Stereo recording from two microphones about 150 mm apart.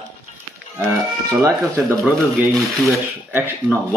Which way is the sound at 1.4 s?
10° right (ahead or behind).